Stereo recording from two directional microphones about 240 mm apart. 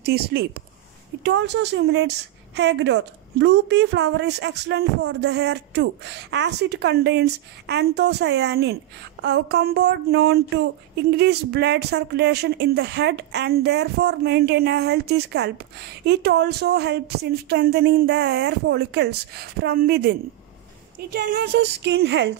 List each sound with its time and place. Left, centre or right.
0.0 s speech: right